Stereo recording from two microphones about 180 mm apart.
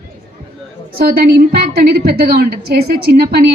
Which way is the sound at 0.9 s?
60° right (ahead or behind).